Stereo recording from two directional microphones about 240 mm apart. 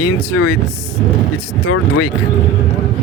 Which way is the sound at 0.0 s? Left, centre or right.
Left.